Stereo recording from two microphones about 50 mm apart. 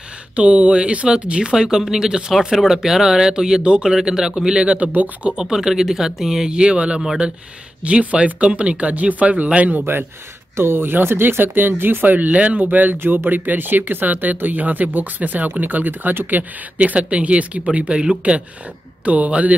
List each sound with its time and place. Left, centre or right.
0.4 s speech: right
10.5 s speech: right